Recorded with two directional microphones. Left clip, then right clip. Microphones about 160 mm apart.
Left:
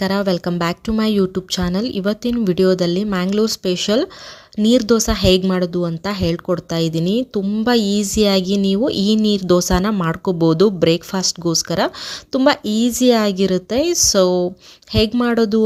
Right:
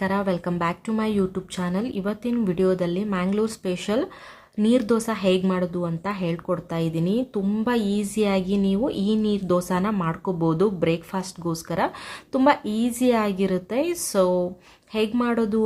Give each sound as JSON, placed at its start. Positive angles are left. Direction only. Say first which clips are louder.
{"t": 0.0, "sound": "speech", "louder": "left 6 dB", "side_deg": 40}